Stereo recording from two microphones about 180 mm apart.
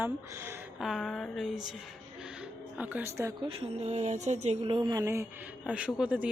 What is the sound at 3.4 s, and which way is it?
Speech, 30° right (ahead or behind).